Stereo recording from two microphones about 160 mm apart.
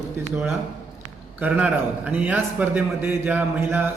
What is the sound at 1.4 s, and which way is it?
A man's voice, 10° right (ahead or behind).